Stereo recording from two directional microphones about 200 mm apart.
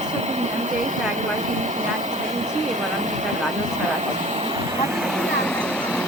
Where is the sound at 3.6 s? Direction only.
35° right (ahead or behind).